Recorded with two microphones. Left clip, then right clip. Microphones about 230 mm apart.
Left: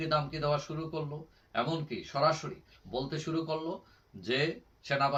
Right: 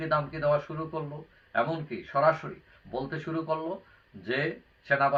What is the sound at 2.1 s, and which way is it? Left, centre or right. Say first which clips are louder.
Speech: right 5 dB; centre.